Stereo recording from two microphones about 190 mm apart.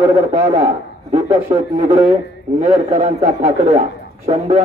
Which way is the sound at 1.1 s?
35° right (ahead or behind).